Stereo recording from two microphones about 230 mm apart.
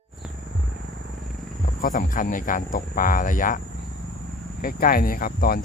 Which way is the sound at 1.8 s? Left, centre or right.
Left.